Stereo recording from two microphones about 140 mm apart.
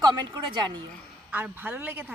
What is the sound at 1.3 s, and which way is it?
Speech, 15° right (ahead or behind).